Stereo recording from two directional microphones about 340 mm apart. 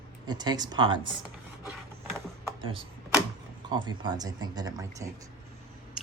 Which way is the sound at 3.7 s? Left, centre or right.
Centre.